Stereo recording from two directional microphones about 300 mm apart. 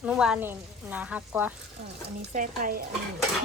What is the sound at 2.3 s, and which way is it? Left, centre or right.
Speech, right.